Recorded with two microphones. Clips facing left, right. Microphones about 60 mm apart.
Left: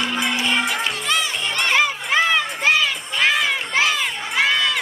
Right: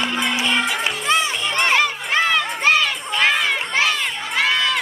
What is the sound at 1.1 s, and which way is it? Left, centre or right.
Music, right.